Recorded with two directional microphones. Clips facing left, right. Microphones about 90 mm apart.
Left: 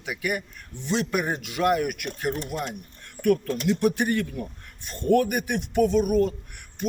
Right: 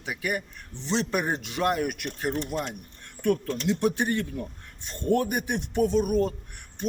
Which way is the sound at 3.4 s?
10° left (ahead or behind).